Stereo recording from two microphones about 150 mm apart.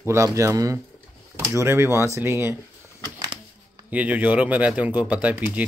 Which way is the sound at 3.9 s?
10° right (ahead or behind).